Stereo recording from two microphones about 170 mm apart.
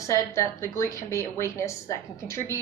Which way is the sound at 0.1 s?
15° left (ahead or behind).